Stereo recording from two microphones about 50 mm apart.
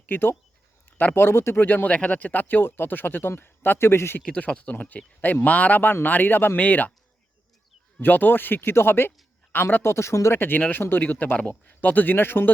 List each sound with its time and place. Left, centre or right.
0.1 s speech: left
1.9 s speech: left
4.3 s a man's voice: left
6.6 s a man's voice: left
8.0 s a man's voice: left
9.9 s speech: left
10.3 s a man's voice: left